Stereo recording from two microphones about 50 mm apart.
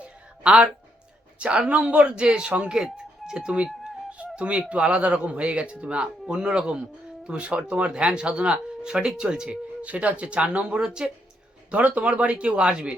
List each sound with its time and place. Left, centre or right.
0.0 s a sound: centre
1.4 s speech: right
2.7 s speech: centre
9.5 s speech: right
11.7 s speech: right